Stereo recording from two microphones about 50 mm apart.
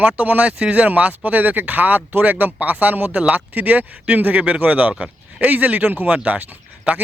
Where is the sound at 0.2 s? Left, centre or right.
Right.